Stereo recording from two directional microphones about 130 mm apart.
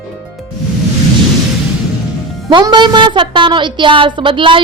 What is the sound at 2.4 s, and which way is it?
A woman's voice, 35° right (ahead or behind).